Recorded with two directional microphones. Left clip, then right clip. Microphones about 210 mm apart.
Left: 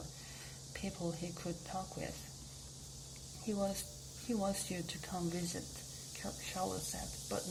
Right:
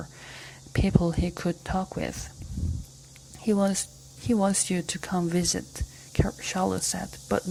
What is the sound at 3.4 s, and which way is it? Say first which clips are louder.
Speech: right 13 dB; 25° right (ahead or behind).